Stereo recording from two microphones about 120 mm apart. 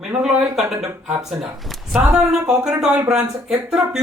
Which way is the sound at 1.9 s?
5° right (ahead or behind).